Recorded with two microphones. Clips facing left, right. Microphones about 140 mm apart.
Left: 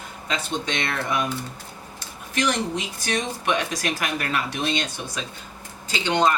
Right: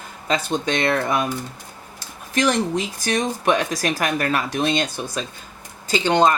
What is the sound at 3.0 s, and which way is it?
Speech, 40° right (ahead or behind).